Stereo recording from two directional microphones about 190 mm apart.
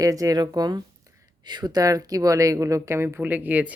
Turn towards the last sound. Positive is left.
turn(degrees=-10)  # may be behind; listen again after turning